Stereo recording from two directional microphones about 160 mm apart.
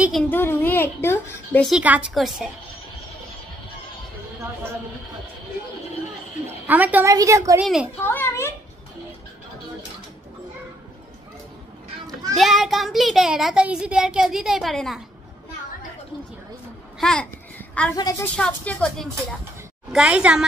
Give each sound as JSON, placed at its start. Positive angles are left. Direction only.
{"t": 0.3, "sound": "speech", "side_deg": 15}
{"t": 1.6, "sound": "a child's voice", "side_deg": -5}
{"t": 6.4, "sound": "a woman's voice", "side_deg": -10}
{"t": 7.6, "sound": "a child's voice", "side_deg": -5}
{"t": 8.0, "sound": "a woman's voice", "side_deg": 15}
{"t": 12.4, "sound": "a child's voice", "side_deg": 0}
{"t": 17.0, "sound": "a child's voice", "side_deg": 5}
{"t": 17.9, "sound": "a woman's voice", "side_deg": 25}
{"t": 18.2, "sound": "speech", "side_deg": 5}
{"t": 19.9, "sound": "a child's voice", "side_deg": -5}